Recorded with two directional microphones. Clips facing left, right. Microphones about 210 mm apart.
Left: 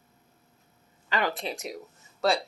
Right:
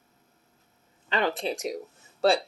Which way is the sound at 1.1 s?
25° right (ahead or behind).